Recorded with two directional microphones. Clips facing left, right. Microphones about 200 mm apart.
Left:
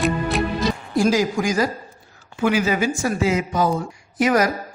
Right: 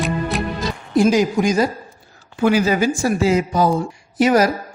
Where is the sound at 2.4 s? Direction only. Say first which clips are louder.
Right 3 dB; 35° right (ahead or behind).